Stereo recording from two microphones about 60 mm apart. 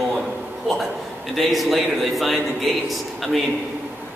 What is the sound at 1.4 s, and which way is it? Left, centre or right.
Speech, centre.